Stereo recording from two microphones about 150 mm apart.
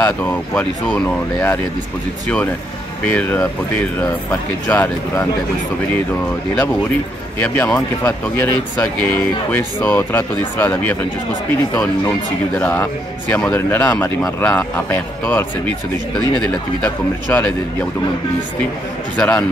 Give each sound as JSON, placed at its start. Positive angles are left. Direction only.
{"t": 0.0, "sound": "speech", "side_deg": 10}
{"t": 3.1, "sound": "speech", "side_deg": 10}
{"t": 7.4, "sound": "speech", "side_deg": 10}
{"t": 12.5, "sound": "speech", "side_deg": 15}
{"t": 19.1, "sound": "speech", "side_deg": 5}